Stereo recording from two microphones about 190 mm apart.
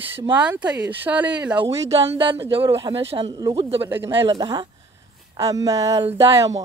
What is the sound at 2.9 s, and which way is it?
A woman's voice, 30° right (ahead or behind).